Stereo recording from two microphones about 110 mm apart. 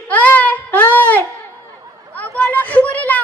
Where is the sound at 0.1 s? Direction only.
15° left (ahead or behind).